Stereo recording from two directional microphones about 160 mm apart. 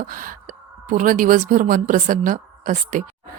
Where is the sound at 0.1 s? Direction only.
60° right (ahead or behind).